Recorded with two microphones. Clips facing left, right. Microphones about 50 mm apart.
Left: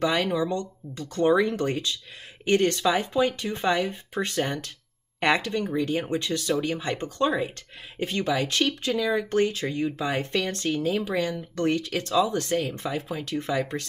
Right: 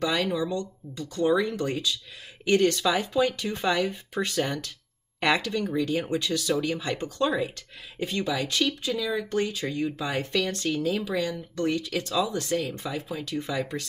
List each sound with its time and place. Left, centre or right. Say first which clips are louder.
0.0 s speech: left 2 dB; left
0.5 s speech: left 1 dB; left